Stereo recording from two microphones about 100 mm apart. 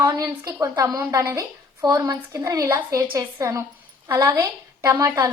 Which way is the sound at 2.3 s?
25° right (ahead or behind).